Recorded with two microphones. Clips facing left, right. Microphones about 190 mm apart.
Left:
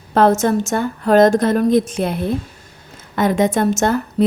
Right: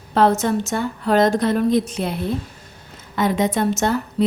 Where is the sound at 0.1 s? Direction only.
45° left (ahead or behind).